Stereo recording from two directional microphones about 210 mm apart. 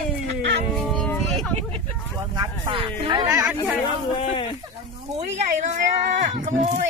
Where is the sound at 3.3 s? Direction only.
5° right (ahead or behind).